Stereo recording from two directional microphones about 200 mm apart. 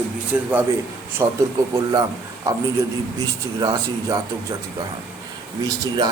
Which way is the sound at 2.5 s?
15° right (ahead or behind).